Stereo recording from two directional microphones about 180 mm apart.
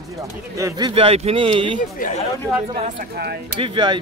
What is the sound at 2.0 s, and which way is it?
Speech, 50° left (ahead or behind).